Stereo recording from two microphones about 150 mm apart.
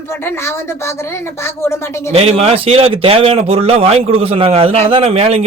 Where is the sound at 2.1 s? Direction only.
45° right (ahead or behind).